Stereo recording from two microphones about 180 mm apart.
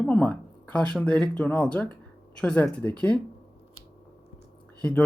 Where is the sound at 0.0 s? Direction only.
5° left (ahead or behind).